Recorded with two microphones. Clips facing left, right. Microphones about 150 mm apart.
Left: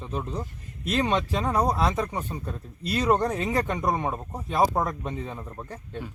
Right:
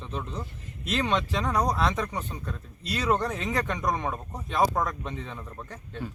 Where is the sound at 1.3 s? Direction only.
30° left (ahead or behind).